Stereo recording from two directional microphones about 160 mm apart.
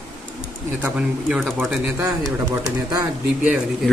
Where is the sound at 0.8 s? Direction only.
5° right (ahead or behind).